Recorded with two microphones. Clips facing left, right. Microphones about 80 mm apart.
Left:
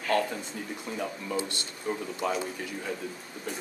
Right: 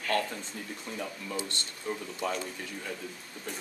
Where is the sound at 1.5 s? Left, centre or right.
Centre.